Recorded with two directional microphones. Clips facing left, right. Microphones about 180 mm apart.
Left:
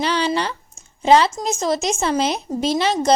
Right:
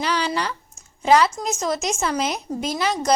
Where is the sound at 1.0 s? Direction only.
25° left (ahead or behind).